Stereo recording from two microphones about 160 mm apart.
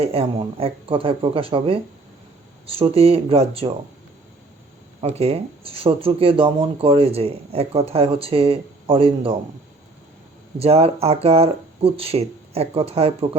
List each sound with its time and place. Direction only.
0.0 s speech: 35° right (ahead or behind)
4.9 s speech: 40° right (ahead or behind)
10.6 s speech: 40° right (ahead or behind)